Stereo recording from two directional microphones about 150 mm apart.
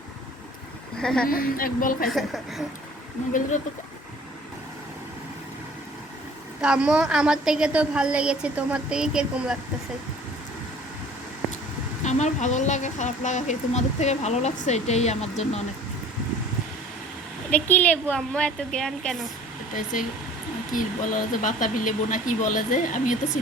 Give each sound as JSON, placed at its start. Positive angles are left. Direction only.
{"t": 1.0, "sound": "a woman's voice", "side_deg": 5}
{"t": 1.3, "sound": "a woman's voice", "side_deg": 70}
{"t": 2.0, "sound": "a woman's voice", "side_deg": 0}
{"t": 6.6, "sound": "a woman's voice", "side_deg": -5}
{"t": 12.0, "sound": "a woman's voice", "side_deg": 50}
{"t": 17.5, "sound": "a woman's voice", "side_deg": 10}
{"t": 19.7, "sound": "speech", "side_deg": 60}